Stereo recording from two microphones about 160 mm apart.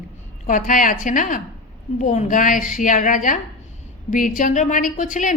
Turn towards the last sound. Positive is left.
turn(degrees=55)  # may be behind; listen again after turning